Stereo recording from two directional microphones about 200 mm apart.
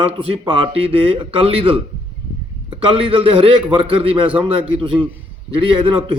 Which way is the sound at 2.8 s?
25° right (ahead or behind).